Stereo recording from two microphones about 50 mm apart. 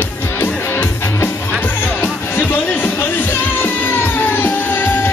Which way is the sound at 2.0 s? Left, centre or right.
Left.